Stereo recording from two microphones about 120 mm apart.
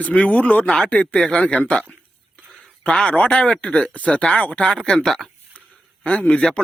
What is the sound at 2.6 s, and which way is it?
A man's voice, 10° left (ahead or behind).